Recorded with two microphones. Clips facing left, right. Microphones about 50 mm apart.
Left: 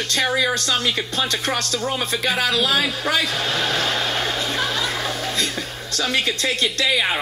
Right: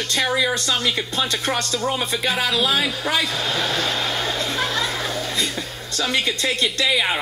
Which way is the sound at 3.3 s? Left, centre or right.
Left.